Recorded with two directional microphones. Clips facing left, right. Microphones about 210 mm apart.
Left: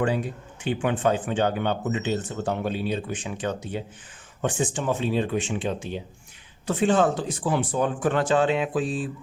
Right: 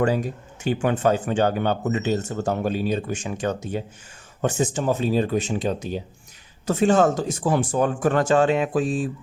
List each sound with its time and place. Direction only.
0.0 s speech: 40° right (ahead or behind)